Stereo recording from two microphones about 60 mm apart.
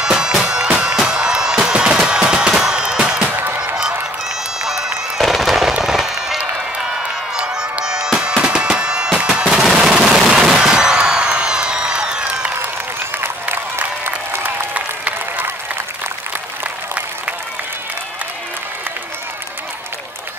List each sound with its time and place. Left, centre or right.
0.0 s music: centre
3.3 s music: right
4.6 s fireworks: centre
7.3 s music: centre
9.6 s gunshot: centre
13.2 s applause: right
14.4 s applause: right